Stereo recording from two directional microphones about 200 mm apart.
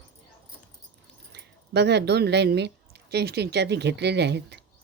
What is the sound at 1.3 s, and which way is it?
Speech, 55° right (ahead or behind).